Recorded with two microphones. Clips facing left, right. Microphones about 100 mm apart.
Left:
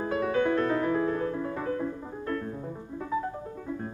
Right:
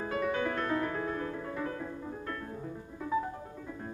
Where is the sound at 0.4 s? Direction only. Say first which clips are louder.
Left 6 dB; 25° left (ahead or behind).